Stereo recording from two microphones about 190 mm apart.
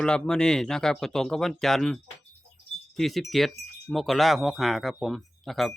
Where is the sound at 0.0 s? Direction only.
5° left (ahead or behind).